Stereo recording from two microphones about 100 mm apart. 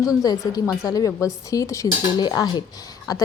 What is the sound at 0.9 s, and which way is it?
A woman's voice, 35° left (ahead or behind).